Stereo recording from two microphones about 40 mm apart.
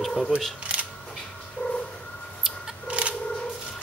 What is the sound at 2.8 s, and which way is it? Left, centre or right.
Fowl, right.